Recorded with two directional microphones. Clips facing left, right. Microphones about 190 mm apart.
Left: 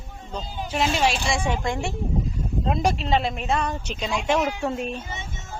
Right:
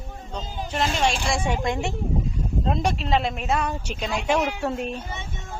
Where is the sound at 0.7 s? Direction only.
5° left (ahead or behind).